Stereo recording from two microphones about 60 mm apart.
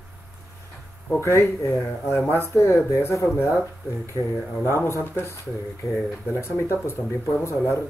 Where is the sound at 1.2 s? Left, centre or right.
Left.